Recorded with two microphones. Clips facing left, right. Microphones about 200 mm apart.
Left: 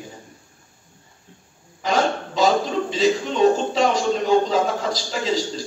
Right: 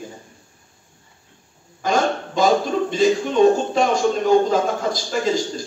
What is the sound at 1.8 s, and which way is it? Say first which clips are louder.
Hiccup: right 1 dB; 50° right (ahead or behind).